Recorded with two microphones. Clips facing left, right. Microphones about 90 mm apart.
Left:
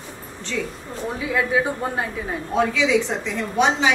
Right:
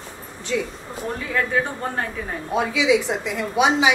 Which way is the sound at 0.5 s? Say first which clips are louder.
Right 3 dB; 10° right (ahead or behind).